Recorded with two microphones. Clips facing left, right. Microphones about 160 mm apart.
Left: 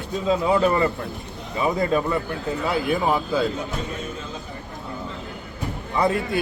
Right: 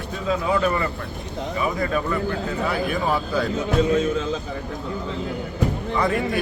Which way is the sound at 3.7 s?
90° right.